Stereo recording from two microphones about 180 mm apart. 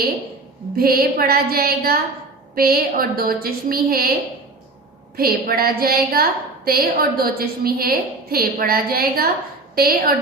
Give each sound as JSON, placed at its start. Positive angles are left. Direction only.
{"t": 0.8, "sound": "a woman's voice", "side_deg": -55}
{"t": 5.1, "sound": "a woman's voice", "side_deg": -55}